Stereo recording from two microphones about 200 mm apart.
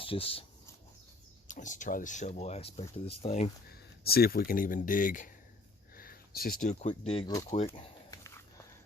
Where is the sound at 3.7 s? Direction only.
50° left (ahead or behind); by 7.3 s 30° left (ahead or behind).